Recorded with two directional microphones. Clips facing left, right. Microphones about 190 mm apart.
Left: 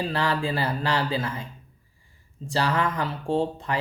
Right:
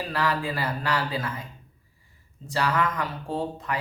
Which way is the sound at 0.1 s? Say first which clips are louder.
Left 1 dB; 30° left (ahead or behind).